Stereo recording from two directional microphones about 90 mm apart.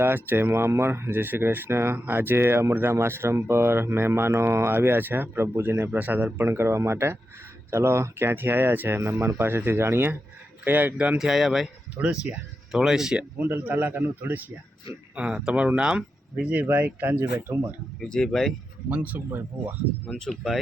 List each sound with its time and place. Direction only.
0.0 s speech: 25° right (ahead or behind)
11.2 s speech: centre (ahead or behind)
11.9 s speech: 15° right (ahead or behind)
13.4 s speech: 20° right (ahead or behind)
18.0 s speech: 5° left (ahead or behind)
18.9 s speech: 15° right (ahead or behind)
20.4 s speech: centre (ahead or behind)